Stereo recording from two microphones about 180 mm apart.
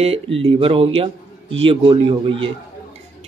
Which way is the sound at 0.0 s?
35° right (ahead or behind).